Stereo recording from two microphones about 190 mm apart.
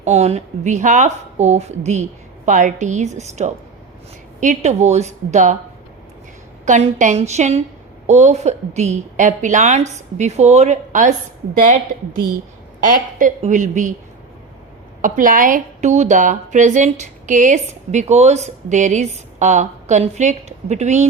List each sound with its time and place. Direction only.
0.0 s a woman's voice: 35° right (ahead or behind)
6.7 s a woman's voice: 40° right (ahead or behind)
12.8 s a woman's voice: 45° right (ahead or behind)
15.0 s a woman's voice: 45° right (ahead or behind)